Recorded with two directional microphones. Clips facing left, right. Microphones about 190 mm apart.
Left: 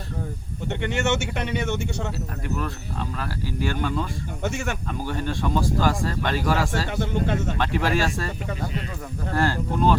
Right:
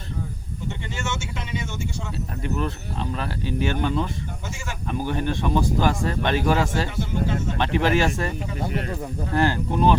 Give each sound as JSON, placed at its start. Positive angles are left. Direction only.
{"t": 0.7, "sound": "speech", "side_deg": 65}
{"t": 2.4, "sound": "speech", "side_deg": -25}
{"t": 4.4, "sound": "speech", "side_deg": 65}
{"t": 4.9, "sound": "speech", "side_deg": -15}
{"t": 9.3, "sound": "speech", "side_deg": -20}